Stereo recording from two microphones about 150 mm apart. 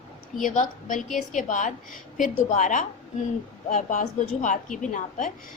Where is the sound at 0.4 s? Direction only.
60° left (ahead or behind).